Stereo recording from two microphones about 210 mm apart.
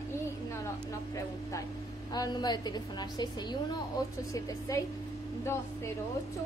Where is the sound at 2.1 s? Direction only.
20° left (ahead or behind).